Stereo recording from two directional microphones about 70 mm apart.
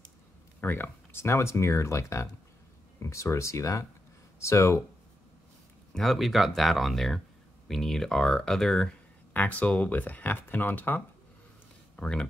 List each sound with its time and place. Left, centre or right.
0.6 s speech: left
5.9 s speech: centre
9.3 s speech: left
12.0 s speech: centre